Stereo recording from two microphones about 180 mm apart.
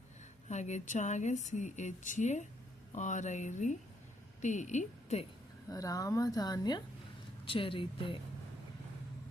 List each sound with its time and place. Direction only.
0.4 s a woman's voice: 40° left (ahead or behind)
5.6 s a woman's voice: 20° left (ahead or behind)